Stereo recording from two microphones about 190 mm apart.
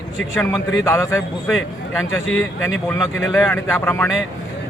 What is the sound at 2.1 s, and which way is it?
Speech, 90° left.